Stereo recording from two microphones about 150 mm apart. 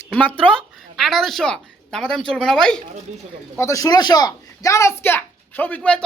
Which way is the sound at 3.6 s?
20° left (ahead or behind).